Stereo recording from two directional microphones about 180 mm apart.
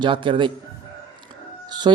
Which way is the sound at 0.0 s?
30° right (ahead or behind).